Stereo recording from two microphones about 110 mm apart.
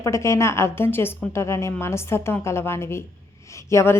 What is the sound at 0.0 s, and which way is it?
Speech, 25° left (ahead or behind).